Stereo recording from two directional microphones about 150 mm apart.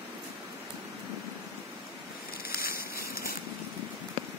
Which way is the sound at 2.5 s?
85° left.